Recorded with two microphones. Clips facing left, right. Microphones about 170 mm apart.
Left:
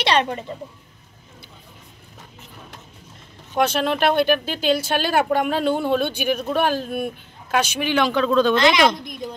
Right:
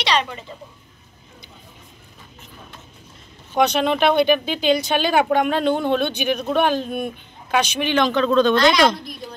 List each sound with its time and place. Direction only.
0.0 s a woman's voice: 55° left (ahead or behind)
3.5 s speech: 5° left (ahead or behind)